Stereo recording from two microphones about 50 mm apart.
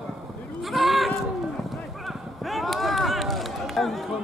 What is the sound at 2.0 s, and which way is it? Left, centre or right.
Run, centre.